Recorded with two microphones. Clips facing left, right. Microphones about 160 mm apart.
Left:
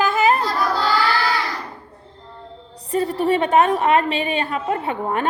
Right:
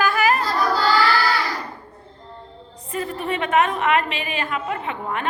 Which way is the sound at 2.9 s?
35° left (ahead or behind).